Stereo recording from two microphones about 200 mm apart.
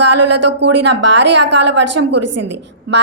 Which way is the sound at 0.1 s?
60° right (ahead or behind).